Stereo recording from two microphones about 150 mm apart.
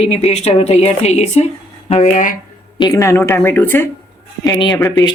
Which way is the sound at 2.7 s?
25° left (ahead or behind).